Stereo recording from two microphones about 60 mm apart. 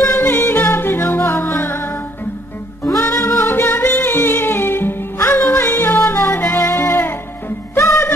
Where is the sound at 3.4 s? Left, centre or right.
Left.